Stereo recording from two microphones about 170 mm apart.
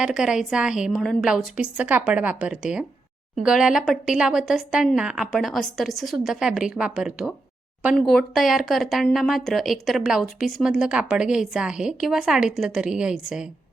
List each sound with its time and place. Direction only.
0.0 s speech: 5° right (ahead or behind)